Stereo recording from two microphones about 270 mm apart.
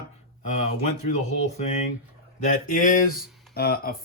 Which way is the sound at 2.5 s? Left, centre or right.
Left.